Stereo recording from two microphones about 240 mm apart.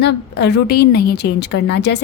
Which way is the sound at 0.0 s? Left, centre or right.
Left.